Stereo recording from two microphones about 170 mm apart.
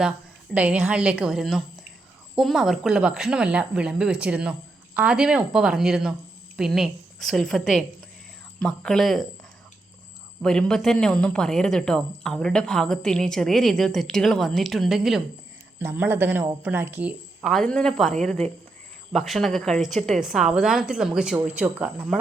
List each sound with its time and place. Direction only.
0.5 s speech: 5° right (ahead or behind)
10.4 s speech: 5° left (ahead or behind)
15.8 s speech: 10° right (ahead or behind)